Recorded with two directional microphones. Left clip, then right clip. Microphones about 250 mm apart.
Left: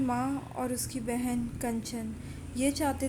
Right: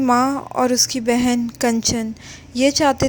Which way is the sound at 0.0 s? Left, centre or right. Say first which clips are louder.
Right 15 dB; right.